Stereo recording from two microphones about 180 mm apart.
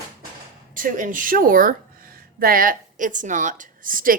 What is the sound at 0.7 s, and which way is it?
A woman's voice, 50° right (ahead or behind).